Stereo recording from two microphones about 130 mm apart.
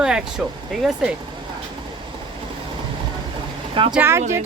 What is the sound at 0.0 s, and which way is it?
Speech, 5° right (ahead or behind).